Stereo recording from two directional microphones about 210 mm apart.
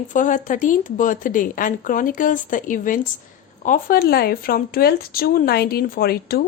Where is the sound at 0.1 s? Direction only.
35° left (ahead or behind).